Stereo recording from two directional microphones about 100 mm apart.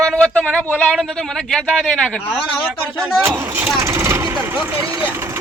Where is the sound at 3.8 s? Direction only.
30° right (ahead or behind).